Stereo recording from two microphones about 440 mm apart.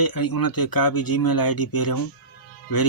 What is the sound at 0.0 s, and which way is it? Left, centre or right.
Speech, left.